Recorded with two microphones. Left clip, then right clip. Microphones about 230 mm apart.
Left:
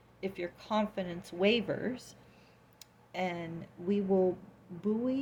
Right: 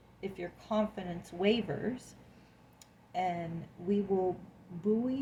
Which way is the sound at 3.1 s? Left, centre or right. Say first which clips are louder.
Right 2 dB; left.